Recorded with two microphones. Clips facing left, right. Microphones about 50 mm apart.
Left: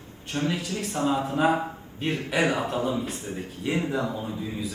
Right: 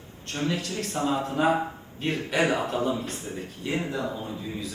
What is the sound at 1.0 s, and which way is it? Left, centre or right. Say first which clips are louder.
A man's voice: left 1 dB; centre.